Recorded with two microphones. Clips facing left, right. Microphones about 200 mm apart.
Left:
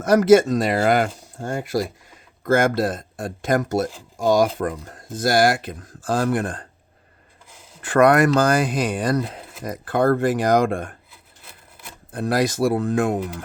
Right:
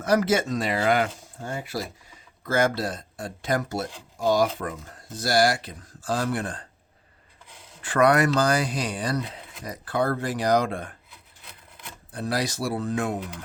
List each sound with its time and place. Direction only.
0.0 s speech: 45° left (ahead or behind)
7.8 s speech: 50° left (ahead or behind)
11.1 s wood: 5° left (ahead or behind)
12.1 s speech: 50° left (ahead or behind)